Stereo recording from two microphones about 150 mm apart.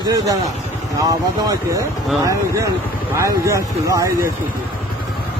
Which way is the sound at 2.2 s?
20° right (ahead or behind).